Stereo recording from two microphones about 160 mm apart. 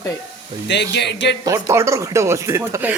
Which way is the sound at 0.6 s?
90° left.